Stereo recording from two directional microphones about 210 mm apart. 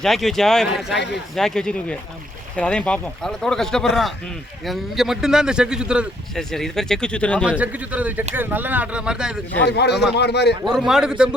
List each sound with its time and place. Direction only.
0.0 s a man's voice: centre (ahead or behind)
0.9 s speech: 55° left (ahead or behind)
1.4 s a man's voice: 5° left (ahead or behind)
7.6 s speech: 5° right (ahead or behind)
9.6 s a man's voice: 50° left (ahead or behind)
10.7 s a man's voice: centre (ahead or behind)